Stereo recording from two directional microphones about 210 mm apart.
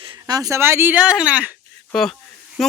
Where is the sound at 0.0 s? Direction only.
20° right (ahead or behind).